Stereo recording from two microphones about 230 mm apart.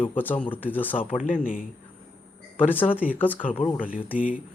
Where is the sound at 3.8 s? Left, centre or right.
Left.